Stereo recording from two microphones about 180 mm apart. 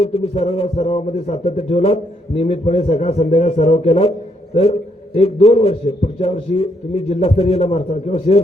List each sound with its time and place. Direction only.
0.0 s a man's voice: 30° left (ahead or behind)